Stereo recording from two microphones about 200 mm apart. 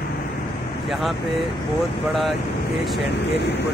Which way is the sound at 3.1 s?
60° left (ahead or behind).